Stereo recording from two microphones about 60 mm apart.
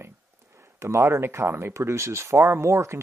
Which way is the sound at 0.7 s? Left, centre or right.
Right.